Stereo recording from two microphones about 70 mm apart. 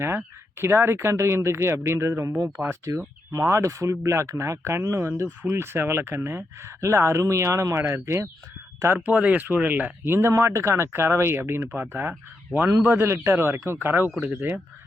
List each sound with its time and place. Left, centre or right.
0.0 s speech: right
9.0 s speech: right
13.1 s speech: right